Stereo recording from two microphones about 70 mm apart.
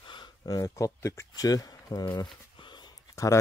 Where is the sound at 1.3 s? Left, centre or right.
Left.